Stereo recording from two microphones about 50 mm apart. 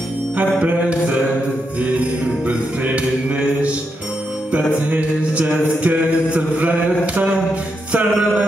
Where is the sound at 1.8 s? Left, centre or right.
Right.